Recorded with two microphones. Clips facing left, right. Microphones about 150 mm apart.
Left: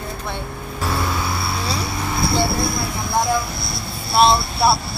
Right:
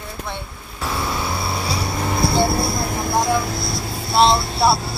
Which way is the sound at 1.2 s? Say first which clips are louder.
Even; 15° right (ahead or behind).